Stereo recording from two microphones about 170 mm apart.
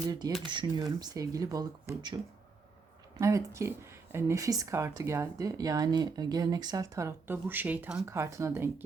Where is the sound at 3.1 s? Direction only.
20° right (ahead or behind).